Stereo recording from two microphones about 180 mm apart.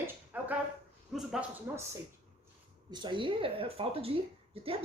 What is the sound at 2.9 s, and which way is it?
Speech, 25° right (ahead or behind).